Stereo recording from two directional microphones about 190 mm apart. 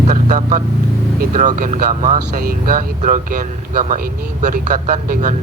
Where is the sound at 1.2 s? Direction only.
45° right (ahead or behind).